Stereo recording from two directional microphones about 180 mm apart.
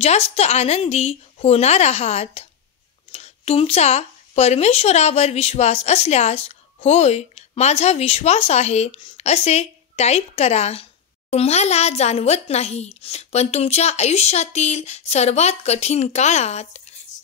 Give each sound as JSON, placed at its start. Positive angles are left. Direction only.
{"t": 0.0, "sound": "speech", "side_deg": 35}